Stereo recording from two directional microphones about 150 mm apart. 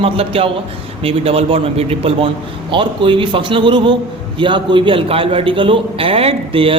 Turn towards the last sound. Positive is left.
turn(degrees=-35)  # may be behind; listen again after turning